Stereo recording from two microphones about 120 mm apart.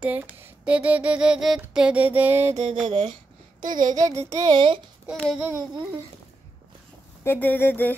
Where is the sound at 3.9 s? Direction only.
30° right (ahead or behind).